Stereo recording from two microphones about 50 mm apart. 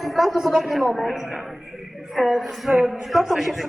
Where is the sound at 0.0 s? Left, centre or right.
Centre.